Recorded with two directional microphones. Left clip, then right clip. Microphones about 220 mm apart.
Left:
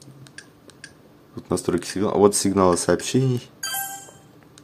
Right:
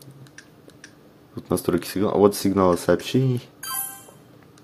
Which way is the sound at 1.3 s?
5° right (ahead or behind).